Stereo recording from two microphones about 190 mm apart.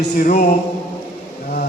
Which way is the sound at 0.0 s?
50° left (ahead or behind).